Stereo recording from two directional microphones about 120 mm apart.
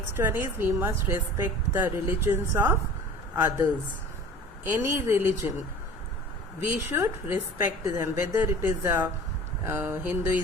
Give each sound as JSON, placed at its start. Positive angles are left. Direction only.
{"t": 0.2, "sound": "a woman's voice", "side_deg": -15}
{"t": 4.7, "sound": "a woman's voice", "side_deg": -20}
{"t": 6.6, "sound": "a woman's voice", "side_deg": -20}